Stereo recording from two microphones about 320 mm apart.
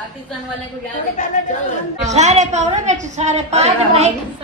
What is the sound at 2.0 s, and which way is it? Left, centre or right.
A woman's voice, right.